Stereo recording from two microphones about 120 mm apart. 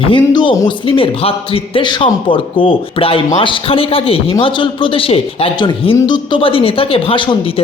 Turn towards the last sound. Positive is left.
turn(degrees=45)  # may be behind; listen again after turning